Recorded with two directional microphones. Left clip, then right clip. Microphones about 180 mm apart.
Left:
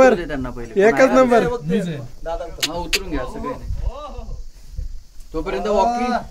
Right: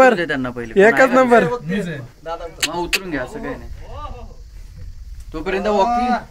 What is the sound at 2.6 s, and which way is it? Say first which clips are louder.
Speech: right 2 dB; 25° right (ahead or behind).